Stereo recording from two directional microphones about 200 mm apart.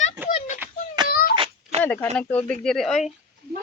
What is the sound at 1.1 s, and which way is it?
Wail, 45° left (ahead or behind).